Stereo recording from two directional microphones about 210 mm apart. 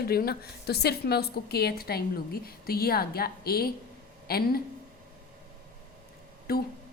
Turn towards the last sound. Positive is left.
turn(degrees=45)  # may be behind; listen again after turning